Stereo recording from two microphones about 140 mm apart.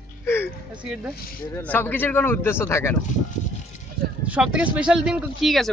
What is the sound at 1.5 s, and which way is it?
Speech, 15° left (ahead or behind).